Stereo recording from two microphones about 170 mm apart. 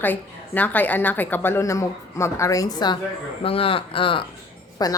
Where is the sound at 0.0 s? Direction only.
10° left (ahead or behind); by 4.3 s 30° left (ahead or behind).